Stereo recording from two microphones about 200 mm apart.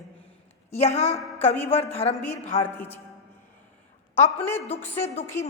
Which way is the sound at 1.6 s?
30° left (ahead or behind).